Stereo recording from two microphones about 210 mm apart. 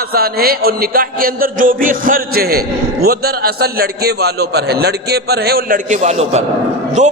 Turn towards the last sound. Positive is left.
turn(degrees=-35)  # may be behind; listen again after turning